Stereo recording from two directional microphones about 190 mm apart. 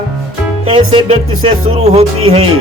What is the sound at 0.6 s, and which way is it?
Music, 30° right (ahead or behind).